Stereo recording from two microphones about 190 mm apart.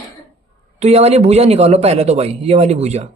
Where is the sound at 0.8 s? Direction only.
35° right (ahead or behind).